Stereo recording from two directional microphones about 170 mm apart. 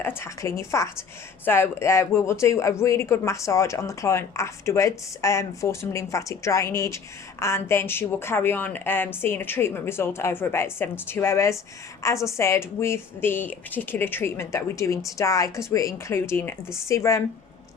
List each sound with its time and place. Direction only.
0.0 s a woman's voice: 15° left (ahead or behind)